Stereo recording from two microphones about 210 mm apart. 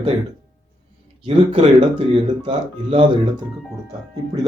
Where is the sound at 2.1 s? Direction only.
25° right (ahead or behind).